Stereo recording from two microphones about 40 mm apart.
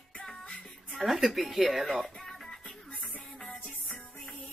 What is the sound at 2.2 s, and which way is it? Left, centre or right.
Music, centre.